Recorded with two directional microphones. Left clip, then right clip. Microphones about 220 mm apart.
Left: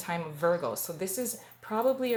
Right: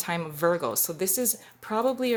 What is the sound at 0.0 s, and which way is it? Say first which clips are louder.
Speech: right 3 dB; 50° right (ahead or behind).